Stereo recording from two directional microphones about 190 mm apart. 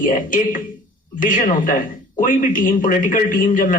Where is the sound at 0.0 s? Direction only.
45° left (ahead or behind).